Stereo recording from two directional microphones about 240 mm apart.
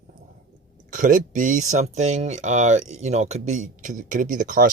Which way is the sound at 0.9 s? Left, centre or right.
Right.